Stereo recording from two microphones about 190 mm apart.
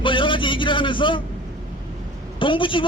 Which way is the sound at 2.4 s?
25° left (ahead or behind).